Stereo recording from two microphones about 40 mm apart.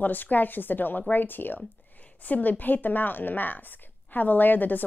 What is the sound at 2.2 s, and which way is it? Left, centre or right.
A woman's voice, left.